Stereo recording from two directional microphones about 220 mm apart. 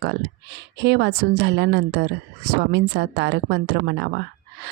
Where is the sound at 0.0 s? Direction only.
50° right (ahead or behind).